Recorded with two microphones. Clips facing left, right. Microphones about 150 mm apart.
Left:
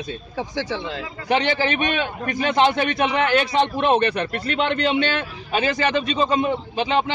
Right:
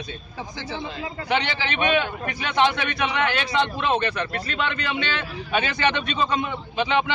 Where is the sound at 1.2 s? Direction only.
45° left (ahead or behind).